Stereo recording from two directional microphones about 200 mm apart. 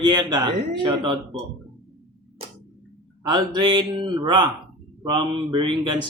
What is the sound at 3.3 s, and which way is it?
Speech, 20° right (ahead or behind).